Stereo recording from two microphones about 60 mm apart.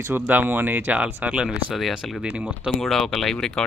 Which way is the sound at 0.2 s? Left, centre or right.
Right.